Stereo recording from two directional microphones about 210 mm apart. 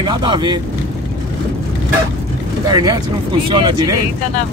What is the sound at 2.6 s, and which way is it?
Speech, 20° right (ahead or behind).